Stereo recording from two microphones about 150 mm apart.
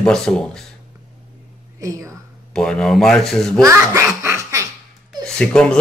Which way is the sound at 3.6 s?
20° right (ahead or behind).